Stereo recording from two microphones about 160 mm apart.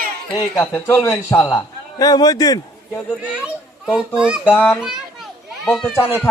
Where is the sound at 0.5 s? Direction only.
10° left (ahead or behind).